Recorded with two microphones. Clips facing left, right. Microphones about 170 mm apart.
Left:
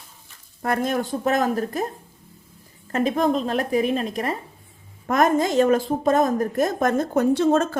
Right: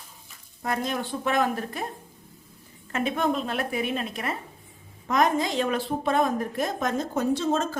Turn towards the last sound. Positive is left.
turn(degrees=60)  # may be behind; listen again after turning